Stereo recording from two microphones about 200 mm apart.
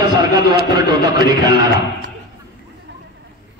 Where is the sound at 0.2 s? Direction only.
20° right (ahead or behind).